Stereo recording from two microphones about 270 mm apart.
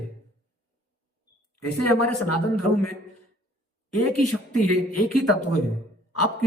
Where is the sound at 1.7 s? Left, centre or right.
Left.